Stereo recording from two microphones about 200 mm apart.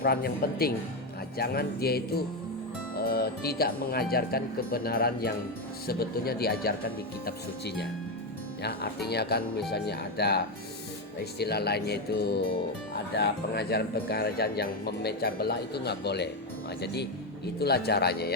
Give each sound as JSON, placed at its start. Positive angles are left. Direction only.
{"t": 0.0, "sound": "speech", "side_deg": 50}